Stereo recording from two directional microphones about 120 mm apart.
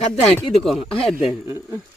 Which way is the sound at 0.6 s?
5° left (ahead or behind).